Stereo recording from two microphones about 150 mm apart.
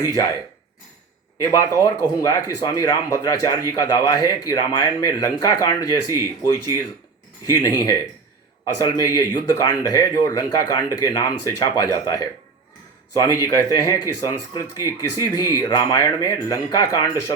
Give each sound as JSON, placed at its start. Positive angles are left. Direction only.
{"t": 0.0, "sound": "speech", "side_deg": 20}
{"t": 1.4, "sound": "speech", "side_deg": 20}
{"t": 7.5, "sound": "speech", "side_deg": 20}